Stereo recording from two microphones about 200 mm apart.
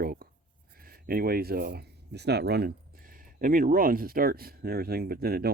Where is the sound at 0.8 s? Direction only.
45° right (ahead or behind).